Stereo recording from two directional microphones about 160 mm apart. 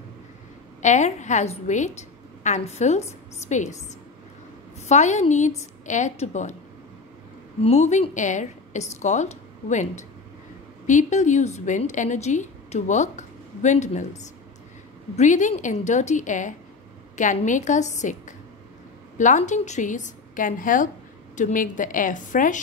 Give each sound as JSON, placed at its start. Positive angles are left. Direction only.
{"t": 0.8, "sound": "a woman's voice", "side_deg": 45}
{"t": 4.7, "sound": "a woman's voice", "side_deg": 45}
{"t": 7.6, "sound": "a woman's voice", "side_deg": 45}
{"t": 19.1, "sound": "a woman's voice", "side_deg": 50}